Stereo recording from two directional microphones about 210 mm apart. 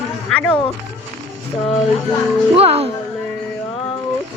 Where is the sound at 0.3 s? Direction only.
5° left (ahead or behind).